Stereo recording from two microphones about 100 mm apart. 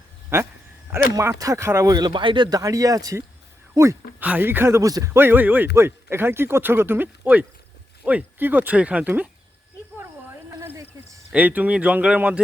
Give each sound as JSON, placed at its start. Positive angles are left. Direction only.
{"t": 0.3, "sound": "speech", "side_deg": -25}
{"t": 2.6, "sound": "speech", "side_deg": -35}
{"t": 4.2, "sound": "speech", "side_deg": -15}
{"t": 5.1, "sound": "speech", "side_deg": -20}
{"t": 11.3, "sound": "speech", "side_deg": -15}